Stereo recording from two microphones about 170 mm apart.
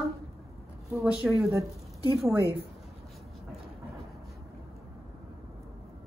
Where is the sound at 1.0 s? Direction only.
5° right (ahead or behind).